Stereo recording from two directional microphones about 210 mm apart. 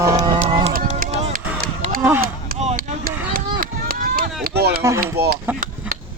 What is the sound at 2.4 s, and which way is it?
Chop, 35° right (ahead or behind).